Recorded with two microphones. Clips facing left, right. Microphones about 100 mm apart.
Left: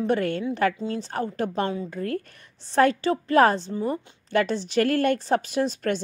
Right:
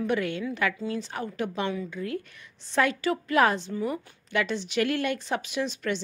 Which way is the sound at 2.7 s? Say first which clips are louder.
Left 5 dB; 35° left (ahead or behind).